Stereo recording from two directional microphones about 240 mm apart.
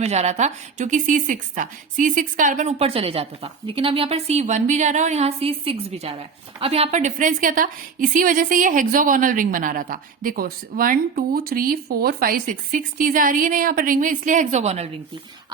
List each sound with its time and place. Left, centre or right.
0.0 s a woman's voice: right